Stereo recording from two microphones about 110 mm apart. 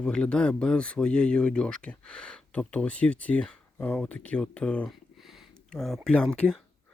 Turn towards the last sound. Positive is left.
turn(degrees=5)  # may be behind; listen again after turning